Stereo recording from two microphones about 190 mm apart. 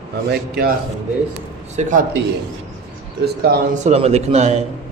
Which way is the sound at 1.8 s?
40° right (ahead or behind).